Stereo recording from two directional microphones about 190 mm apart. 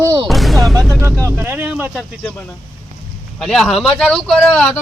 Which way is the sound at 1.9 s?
5° left (ahead or behind).